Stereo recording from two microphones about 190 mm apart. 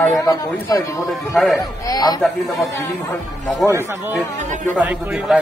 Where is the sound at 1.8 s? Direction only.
20° left (ahead or behind).